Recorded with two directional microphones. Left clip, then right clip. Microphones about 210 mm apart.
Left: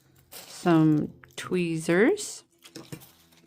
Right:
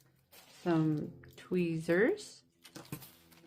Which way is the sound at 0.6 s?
50° left (ahead or behind).